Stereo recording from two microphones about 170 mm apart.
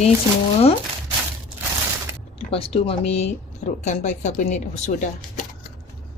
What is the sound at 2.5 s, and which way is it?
Speech, 35° left (ahead or behind).